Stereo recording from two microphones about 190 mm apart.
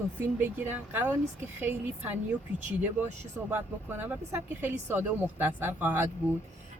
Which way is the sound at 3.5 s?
10° right (ahead or behind).